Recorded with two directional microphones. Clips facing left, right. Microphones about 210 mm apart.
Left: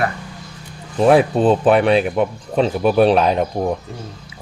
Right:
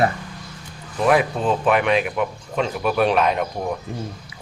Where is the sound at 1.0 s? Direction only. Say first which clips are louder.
Left 6 dB; 30° left (ahead or behind).